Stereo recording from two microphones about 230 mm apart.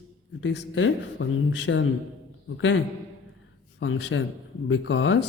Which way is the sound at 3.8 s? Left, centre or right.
Left.